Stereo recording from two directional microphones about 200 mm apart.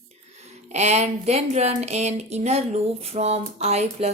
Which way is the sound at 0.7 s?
35° right (ahead or behind).